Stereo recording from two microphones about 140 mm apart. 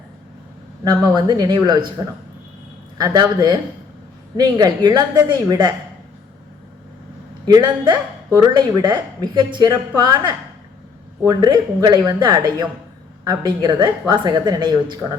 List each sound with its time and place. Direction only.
1.1 s speech: 30° right (ahead or behind)
7.4 s speech: 30° right (ahead or behind)